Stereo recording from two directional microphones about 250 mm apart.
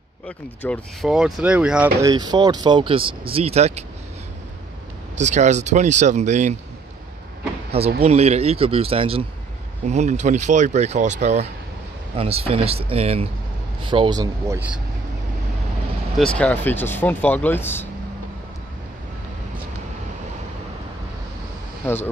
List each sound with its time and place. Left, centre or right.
0.6 s speech: centre; by 3.8 s right
5.1 s speech: right
8.0 s speech: right; by 14.8 s centre
16.2 s speech: centre
21.8 s speech: centre